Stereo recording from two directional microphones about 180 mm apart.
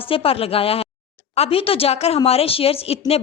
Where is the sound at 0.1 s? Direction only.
30° left (ahead or behind).